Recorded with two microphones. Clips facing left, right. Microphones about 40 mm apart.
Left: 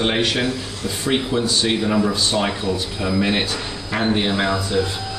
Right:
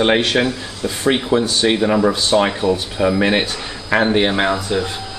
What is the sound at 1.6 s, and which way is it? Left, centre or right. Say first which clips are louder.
Speech: right 4 dB; right.